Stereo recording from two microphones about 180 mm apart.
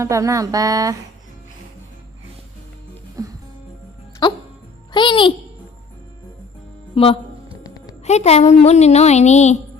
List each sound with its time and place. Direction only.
0.0 s speech: 15° right (ahead or behind)
3.2 s music: 20° right (ahead or behind)
4.2 s music: 25° left (ahead or behind)
4.9 s a child's voice: 25° left (ahead or behind)
6.9 s music: 30° left (ahead or behind)
7.6 s music: 20° left (ahead or behind)
8.0 s a woman's voice: 40° left (ahead or behind)